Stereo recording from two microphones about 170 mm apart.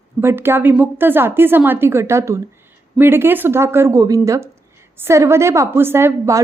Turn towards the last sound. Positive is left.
turn(degrees=-15)  # may be behind; listen again after turning